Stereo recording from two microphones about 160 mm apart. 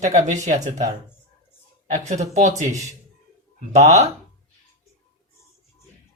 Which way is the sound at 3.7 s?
45° right (ahead or behind).